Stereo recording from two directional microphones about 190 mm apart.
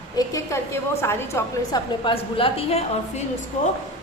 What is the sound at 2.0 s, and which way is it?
A woman's voice, 30° left (ahead or behind).